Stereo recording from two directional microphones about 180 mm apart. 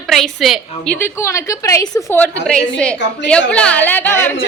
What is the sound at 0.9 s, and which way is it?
A woman's voice, 15° left (ahead or behind).